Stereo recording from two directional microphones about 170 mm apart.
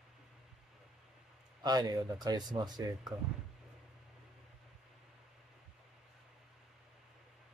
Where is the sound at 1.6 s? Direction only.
25° right (ahead or behind).